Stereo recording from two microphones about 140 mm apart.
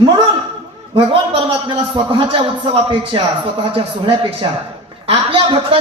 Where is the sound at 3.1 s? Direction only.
35° right (ahead or behind).